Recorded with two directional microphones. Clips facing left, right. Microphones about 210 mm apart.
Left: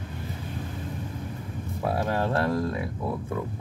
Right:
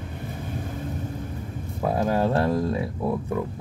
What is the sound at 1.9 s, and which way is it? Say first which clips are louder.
Speech: right 4 dB; 20° right (ahead or behind).